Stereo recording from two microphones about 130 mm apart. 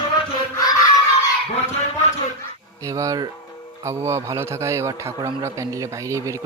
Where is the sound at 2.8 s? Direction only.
25° right (ahead or behind).